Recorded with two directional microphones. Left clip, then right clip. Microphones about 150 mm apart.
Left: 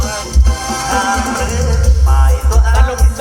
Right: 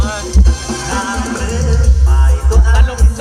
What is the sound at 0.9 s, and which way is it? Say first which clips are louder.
Music: left 5 dB; 20° right (ahead or behind).